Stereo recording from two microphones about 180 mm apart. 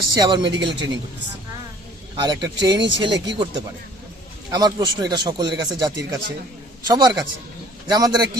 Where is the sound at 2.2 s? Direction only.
25° right (ahead or behind).